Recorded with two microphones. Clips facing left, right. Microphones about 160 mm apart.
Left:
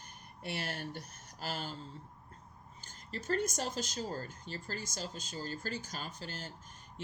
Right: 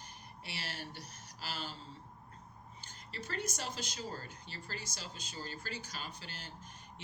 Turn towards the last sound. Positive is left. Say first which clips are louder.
# left 4 dB
turn(degrees=45)  # may be behind; listen again after turning